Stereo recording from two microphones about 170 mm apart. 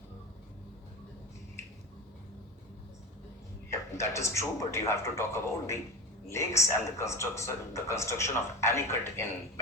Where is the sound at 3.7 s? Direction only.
15° left (ahead or behind).